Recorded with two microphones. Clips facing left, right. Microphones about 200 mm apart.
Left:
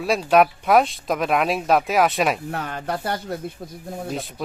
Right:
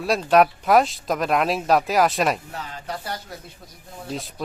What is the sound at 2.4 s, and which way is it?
Speech, 60° left (ahead or behind).